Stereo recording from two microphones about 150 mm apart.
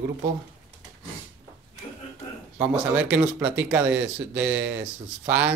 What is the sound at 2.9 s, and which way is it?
Speech, 10° right (ahead or behind).